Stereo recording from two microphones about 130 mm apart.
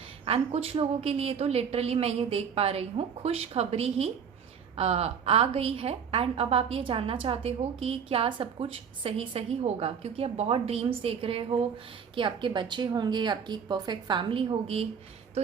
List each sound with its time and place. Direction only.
0.3 s a woman's voice: 50° right (ahead or behind)